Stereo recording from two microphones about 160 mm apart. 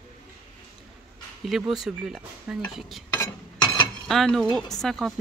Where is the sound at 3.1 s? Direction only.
25° left (ahead or behind).